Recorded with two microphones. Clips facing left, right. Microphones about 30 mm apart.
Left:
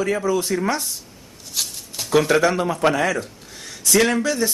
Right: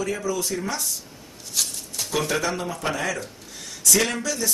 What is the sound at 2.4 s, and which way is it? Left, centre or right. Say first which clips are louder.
A man's voice: left 8 dB; left.